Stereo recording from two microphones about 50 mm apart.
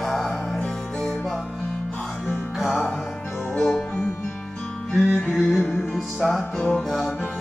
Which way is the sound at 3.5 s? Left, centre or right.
Centre.